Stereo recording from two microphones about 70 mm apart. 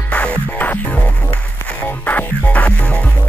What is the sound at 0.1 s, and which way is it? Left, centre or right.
Music, centre.